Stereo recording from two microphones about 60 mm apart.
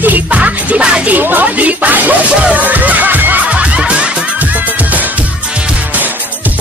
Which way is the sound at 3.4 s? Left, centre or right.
Right.